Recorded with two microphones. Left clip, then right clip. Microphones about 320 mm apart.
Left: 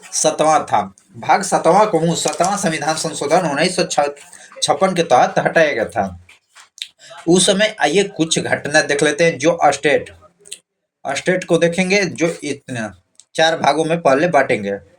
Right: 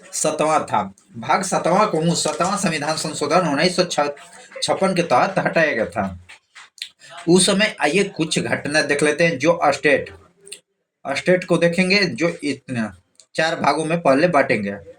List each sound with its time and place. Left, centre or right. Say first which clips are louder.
0.3 s speech: left 4 dB; left
7.3 s speech: left 3 dB; left